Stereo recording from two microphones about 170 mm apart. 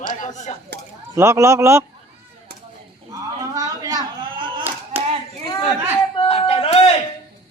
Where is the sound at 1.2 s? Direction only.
15° right (ahead or behind).